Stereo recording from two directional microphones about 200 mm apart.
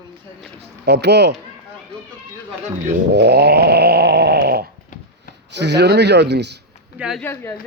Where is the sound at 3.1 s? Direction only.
55° right (ahead or behind).